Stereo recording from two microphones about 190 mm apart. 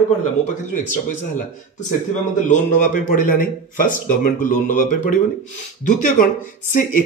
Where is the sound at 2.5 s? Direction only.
40° left (ahead or behind).